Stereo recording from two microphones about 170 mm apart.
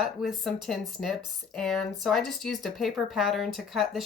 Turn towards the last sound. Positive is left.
turn(degrees=0)  # may be behind; listen again after turning